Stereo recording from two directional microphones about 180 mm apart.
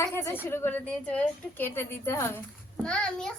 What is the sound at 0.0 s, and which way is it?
A woman's voice, 15° left (ahead or behind).